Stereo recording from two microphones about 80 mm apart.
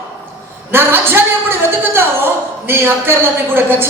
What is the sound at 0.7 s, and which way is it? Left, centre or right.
A woman's voice, right.